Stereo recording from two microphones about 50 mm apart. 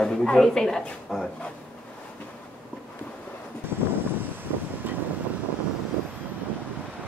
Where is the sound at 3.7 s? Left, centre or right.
Right.